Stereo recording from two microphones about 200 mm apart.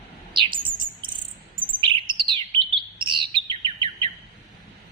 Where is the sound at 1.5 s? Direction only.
25° right (ahead or behind).